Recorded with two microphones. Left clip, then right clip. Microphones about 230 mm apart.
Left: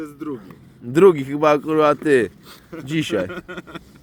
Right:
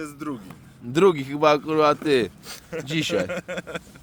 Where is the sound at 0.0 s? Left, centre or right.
Right.